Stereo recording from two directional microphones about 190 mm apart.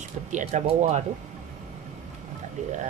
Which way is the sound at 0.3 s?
40° right (ahead or behind).